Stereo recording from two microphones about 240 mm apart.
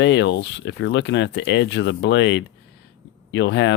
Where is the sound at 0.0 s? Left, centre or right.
Left.